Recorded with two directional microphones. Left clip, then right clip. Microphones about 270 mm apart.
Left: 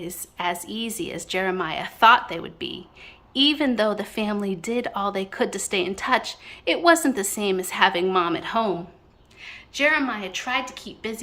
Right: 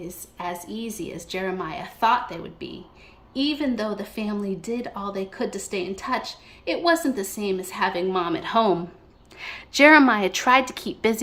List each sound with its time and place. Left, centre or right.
0.0 s speech: centre
9.4 s a woman's voice: centre